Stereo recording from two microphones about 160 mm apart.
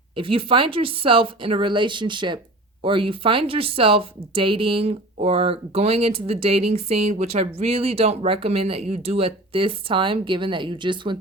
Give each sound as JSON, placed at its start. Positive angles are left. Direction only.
{"t": 0.2, "sound": "speech", "side_deg": -35}